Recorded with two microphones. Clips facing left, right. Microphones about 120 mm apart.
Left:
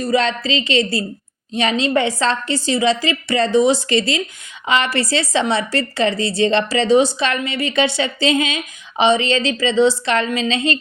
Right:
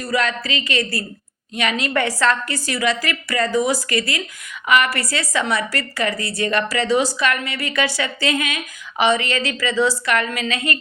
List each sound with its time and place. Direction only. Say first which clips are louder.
0.0 s a woman's voice: left 4 dB; 25° left (ahead or behind)